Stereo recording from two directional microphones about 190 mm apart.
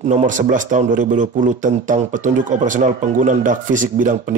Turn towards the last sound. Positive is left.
turn(degrees=-45)  # may be behind; listen again after turning